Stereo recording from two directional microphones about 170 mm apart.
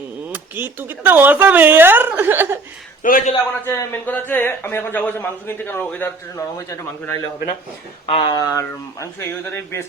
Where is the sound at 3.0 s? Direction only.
55° left (ahead or behind).